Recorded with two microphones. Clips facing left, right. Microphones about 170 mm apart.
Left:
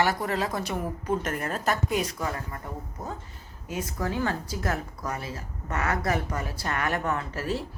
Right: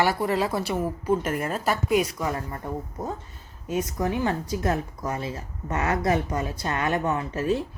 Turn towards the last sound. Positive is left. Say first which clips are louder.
# right 5 dB
turn(degrees=-20)  # may be behind; listen again after turning